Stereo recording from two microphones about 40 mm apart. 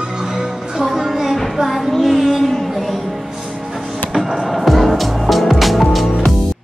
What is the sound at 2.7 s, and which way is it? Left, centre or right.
Music, centre.